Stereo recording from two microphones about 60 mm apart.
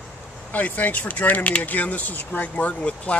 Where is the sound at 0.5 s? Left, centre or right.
Left.